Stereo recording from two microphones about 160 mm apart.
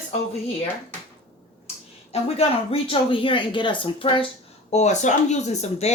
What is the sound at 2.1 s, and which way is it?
Speech, 40° left (ahead or behind).